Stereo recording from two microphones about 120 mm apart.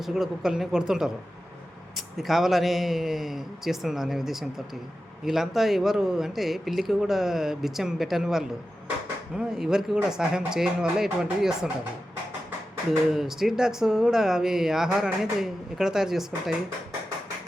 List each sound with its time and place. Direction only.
0.0 s speech: centre (ahead or behind)
2.1 s speech: 5° right (ahead or behind)
13.1 s speech: 5° right (ahead or behind)